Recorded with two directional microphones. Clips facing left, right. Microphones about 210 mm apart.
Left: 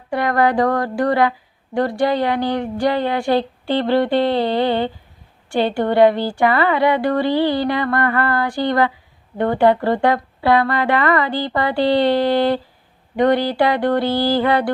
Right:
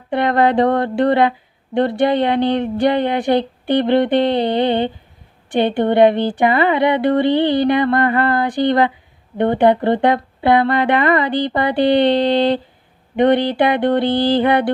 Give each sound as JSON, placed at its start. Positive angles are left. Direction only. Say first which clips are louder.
{"t": 0.1, "sound": "speech", "louder": "right 2 dB", "side_deg": -25}